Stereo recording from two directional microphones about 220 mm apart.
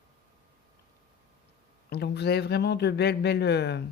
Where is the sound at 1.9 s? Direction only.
50° left (ahead or behind).